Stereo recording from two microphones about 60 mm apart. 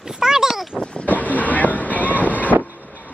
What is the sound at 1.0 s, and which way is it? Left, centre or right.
Vehicle, left.